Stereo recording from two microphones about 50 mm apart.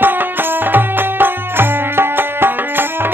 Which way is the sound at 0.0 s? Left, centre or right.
Right.